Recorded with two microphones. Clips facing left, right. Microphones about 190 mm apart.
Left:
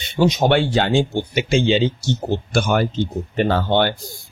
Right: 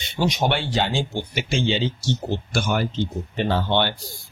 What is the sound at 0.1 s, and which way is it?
Speech, 50° left (ahead or behind).